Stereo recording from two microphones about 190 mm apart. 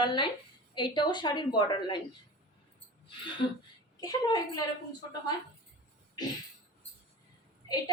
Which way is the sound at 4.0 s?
20° left (ahead or behind).